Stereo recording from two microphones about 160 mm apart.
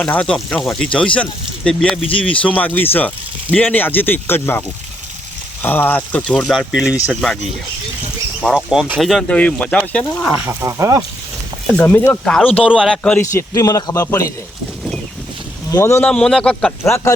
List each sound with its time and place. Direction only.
0.0 s speech: 5° left (ahead or behind)
5.6 s speech: 10° left (ahead or behind); by 7.3 s 5° right (ahead or behind)
8.4 s speech: centre (ahead or behind)
10.4 s speech: 15° right (ahead or behind)
11.7 s speech: 10° left (ahead or behind)
13.0 s a man's voice: 10° left (ahead or behind)
15.7 s speech: 15° left (ahead or behind)